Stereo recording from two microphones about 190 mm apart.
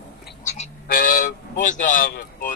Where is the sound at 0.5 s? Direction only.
45° left (ahead or behind).